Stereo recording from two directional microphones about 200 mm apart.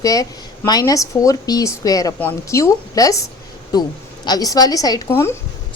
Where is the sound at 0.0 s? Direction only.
15° left (ahead or behind).